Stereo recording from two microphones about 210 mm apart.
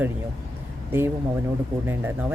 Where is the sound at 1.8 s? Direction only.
10° right (ahead or behind).